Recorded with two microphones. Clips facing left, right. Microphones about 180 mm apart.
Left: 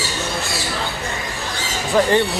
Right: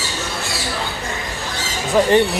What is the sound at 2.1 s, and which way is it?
Speech, 20° right (ahead or behind).